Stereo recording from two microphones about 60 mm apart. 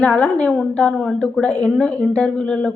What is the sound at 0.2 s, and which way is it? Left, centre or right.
A woman's voice, left.